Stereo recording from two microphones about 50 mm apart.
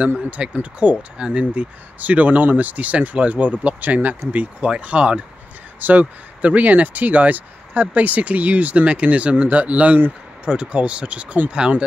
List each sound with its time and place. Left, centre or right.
0.3 s speech: right
1.1 s speech: centre
5.8 s speech: right
10.4 s speech: right